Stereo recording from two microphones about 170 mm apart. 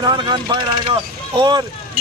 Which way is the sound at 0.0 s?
25° right (ahead or behind).